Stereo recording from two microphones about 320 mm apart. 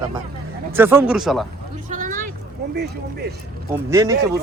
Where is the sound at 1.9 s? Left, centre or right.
Right.